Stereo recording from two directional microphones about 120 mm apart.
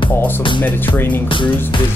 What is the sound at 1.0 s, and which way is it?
Speech, 15° left (ahead or behind).